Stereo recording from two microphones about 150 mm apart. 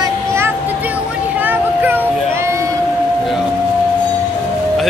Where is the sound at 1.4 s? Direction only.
10° right (ahead or behind).